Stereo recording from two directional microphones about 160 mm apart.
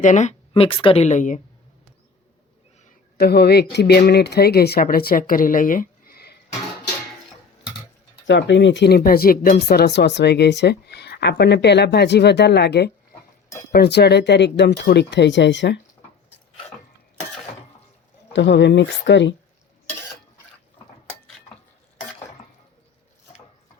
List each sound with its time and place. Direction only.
0.0 s a woman's voice: 50° left (ahead or behind); by 1.0 s 35° left (ahead or behind)
1.0 s speech: 50° left (ahead or behind)
3.2 s speech: 90° left; by 6.3 s 70° left (ahead or behind)
8.3 s speech: 90° left
18.3 s speech: 90° left